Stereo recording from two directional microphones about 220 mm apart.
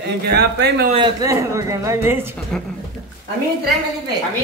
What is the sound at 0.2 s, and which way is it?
Speech, 50° right (ahead or behind).